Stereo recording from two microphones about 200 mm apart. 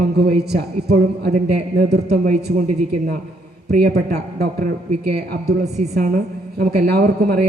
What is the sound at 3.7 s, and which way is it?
A woman's voice, 50° right (ahead or behind).